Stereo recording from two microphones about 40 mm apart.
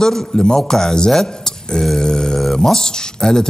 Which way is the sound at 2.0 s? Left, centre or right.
Centre.